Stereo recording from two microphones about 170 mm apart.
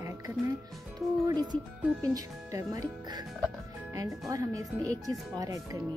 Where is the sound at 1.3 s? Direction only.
25° right (ahead or behind).